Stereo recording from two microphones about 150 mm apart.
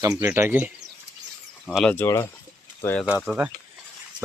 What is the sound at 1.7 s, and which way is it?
Speech, 5° left (ahead or behind).